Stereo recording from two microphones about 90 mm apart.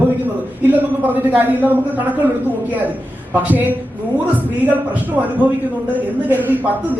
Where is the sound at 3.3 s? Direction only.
20° right (ahead or behind).